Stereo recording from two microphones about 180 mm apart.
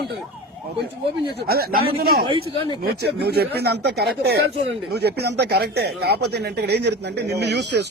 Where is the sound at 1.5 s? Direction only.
60° right (ahead or behind).